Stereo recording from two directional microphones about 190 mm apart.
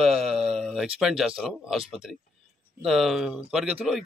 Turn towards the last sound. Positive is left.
turn(degrees=0)  # may be behind; listen again after turning